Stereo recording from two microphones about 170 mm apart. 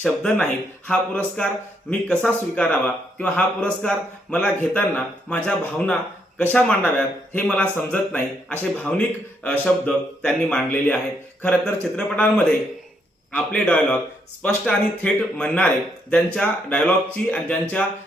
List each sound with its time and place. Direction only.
0.0 s a man's voice: 5° left (ahead or behind)